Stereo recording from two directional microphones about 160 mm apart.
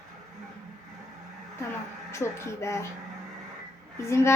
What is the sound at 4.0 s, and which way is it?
Speech, 15° left (ahead or behind).